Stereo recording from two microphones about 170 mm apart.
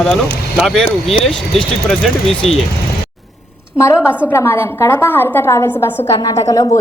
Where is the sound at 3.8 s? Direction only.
15° left (ahead or behind).